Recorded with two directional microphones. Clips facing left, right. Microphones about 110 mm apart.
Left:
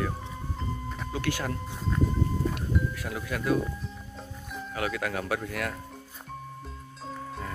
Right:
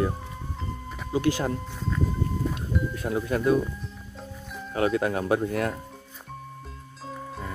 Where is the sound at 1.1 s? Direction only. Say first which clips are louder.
Right 7 dB; 20° right (ahead or behind).